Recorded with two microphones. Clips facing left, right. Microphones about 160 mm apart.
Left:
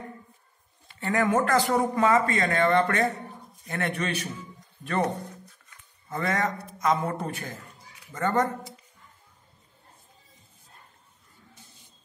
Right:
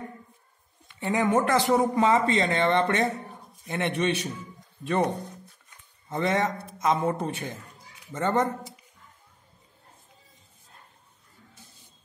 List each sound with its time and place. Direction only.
0.9 s a man's voice: 20° right (ahead or behind)
6.0 s a man's voice: 25° right (ahead or behind)